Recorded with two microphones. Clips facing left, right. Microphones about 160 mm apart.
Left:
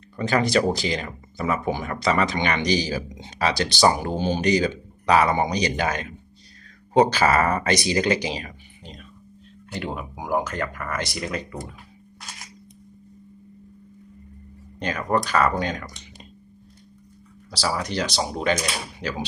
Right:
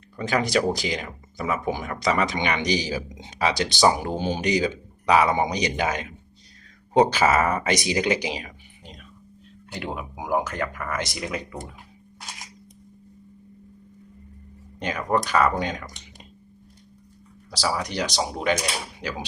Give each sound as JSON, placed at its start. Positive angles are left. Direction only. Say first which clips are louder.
{"t": 0.2, "sound": "speech", "louder": "left 2 dB", "side_deg": -10}
{"t": 14.8, "sound": "speech", "louder": "left 1 dB", "side_deg": -15}
{"t": 17.5, "sound": "speech", "louder": "left 1 dB", "side_deg": -15}